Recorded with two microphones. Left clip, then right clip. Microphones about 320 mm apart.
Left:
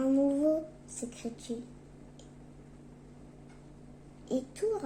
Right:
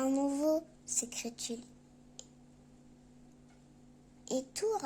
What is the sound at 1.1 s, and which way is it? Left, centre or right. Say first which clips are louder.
Speech: even; right.